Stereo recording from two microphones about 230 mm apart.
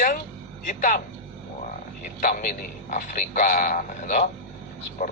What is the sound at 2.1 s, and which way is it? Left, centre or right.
A man's voice, left.